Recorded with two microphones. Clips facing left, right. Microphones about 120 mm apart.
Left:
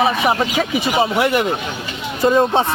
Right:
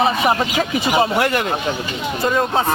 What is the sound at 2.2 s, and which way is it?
Speech, 25° left (ahead or behind).